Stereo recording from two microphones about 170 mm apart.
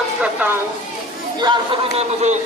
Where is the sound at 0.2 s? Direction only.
10° right (ahead or behind).